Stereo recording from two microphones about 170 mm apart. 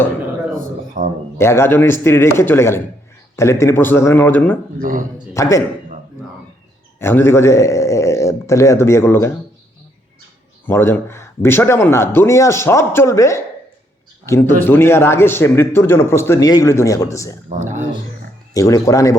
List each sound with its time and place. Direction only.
0.5 s a sound: 55° right (ahead or behind)
1.4 s speech: 15° left (ahead or behind)
4.8 s speech: 50° right (ahead or behind)
5.3 s speech: 20° left (ahead or behind)
7.0 s speech: 15° left (ahead or behind)
10.7 s speech: 15° left (ahead or behind)
17.6 s speech: 45° right (ahead or behind)
18.5 s speech: 20° left (ahead or behind)